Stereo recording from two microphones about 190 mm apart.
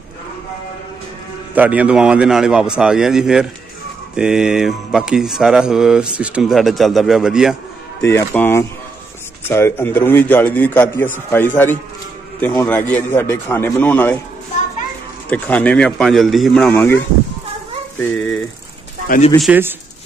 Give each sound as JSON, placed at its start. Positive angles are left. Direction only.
{"t": 1.5, "sound": "speech", "side_deg": -10}
{"t": 8.0, "sound": "a man's voice", "side_deg": 10}
{"t": 15.2, "sound": "a man's voice", "side_deg": 10}
{"t": 19.0, "sound": "speech", "side_deg": 40}
{"t": 19.4, "sound": "speech", "side_deg": -10}